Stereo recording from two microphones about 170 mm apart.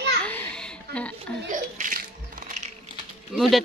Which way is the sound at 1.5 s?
50° right (ahead or behind).